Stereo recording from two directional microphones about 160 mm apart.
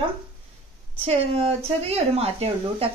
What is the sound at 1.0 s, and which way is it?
A woman's voice, 40° right (ahead or behind).